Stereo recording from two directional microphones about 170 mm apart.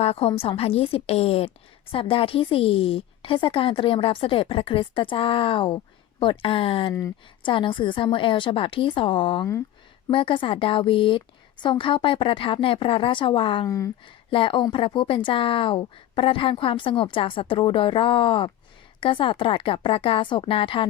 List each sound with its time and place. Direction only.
0.0 s a woman's voice: 35° left (ahead or behind)
13.7 s speech: 20° left (ahead or behind)
14.3 s a woman's voice: 30° left (ahead or behind)